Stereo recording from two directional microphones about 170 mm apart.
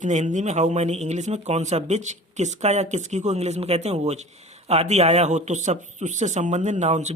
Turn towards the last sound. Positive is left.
turn(degrees=-40)  # may be behind; listen again after turning